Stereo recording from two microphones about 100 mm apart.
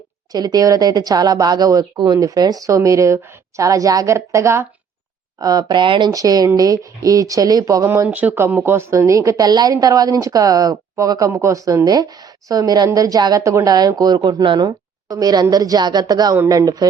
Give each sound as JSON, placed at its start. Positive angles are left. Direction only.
{"t": 0.3, "sound": "a woman's voice", "side_deg": -40}
{"t": 5.4, "sound": "speech", "side_deg": -40}
{"t": 6.1, "sound": "a woman's voice", "side_deg": -35}
{"t": 7.9, "sound": "a woman's voice", "side_deg": -20}